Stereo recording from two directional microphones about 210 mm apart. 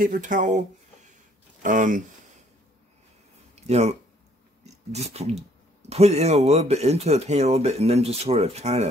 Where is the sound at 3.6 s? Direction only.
30° right (ahead or behind).